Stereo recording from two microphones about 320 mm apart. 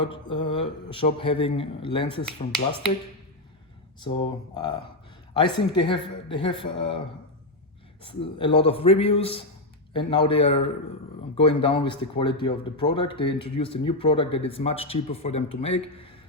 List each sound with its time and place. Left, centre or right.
0.0 s speech: centre
4.0 s a woman's voice: centre
8.0 s speech: centre